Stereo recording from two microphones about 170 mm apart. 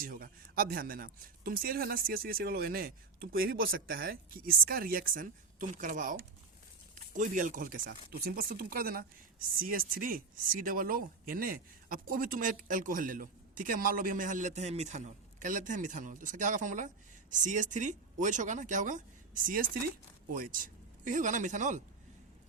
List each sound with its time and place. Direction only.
0.0 s speech: 60° right (ahead or behind)